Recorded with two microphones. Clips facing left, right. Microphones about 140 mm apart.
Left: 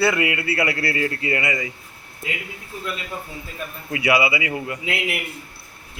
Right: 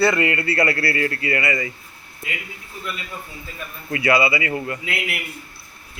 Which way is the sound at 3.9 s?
15° left (ahead or behind).